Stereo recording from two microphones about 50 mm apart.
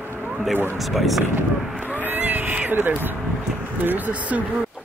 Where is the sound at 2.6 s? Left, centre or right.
Right.